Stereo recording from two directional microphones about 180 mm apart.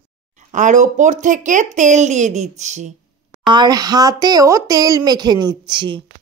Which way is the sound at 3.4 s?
25° right (ahead or behind).